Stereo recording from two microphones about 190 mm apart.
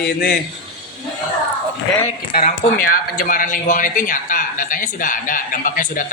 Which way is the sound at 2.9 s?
45° left (ahead or behind).